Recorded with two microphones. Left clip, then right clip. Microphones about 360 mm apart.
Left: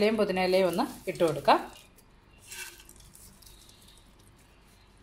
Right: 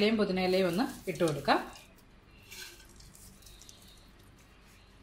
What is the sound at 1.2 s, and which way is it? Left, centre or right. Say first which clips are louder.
Speech: left 5 dB; centre.